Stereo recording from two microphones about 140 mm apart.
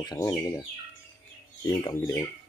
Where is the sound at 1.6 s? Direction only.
25° left (ahead or behind).